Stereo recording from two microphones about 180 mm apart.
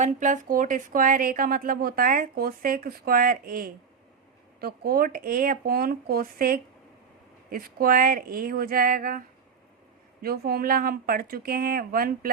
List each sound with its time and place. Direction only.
0.0 s speech: 45° right (ahead or behind)
10.2 s speech: 60° right (ahead or behind)